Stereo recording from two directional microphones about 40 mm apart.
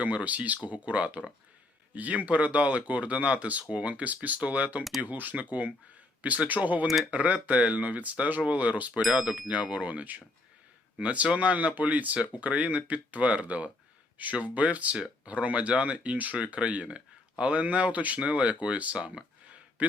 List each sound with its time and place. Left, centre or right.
0.0 s speech: right
6.8 s speech: centre
7.1 s speech: right